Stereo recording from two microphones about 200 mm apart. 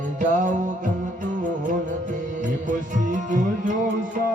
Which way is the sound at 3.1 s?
40° right (ahead or behind).